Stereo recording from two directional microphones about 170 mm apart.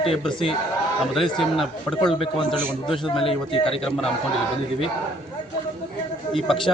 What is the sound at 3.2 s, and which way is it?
Speech, 35° left (ahead or behind).